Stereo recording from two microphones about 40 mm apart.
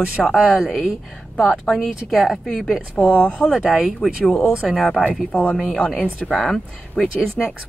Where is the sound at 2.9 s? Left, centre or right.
Left.